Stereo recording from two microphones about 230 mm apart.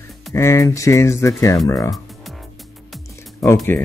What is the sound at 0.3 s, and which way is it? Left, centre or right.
Speech, centre.